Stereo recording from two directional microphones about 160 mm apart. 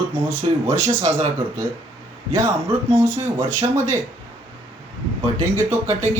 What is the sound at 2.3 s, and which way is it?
Speech, 15° right (ahead or behind).